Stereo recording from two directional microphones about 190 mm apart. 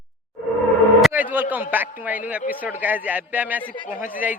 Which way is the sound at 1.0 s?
10° right (ahead or behind).